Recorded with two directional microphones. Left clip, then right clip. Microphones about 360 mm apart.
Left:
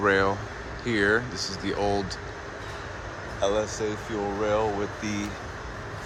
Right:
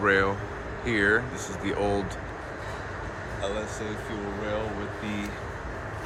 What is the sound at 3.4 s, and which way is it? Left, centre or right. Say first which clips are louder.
Speech: left 7 dB; centre.